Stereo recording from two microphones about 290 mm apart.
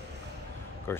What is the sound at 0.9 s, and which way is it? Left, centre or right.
Speech, centre.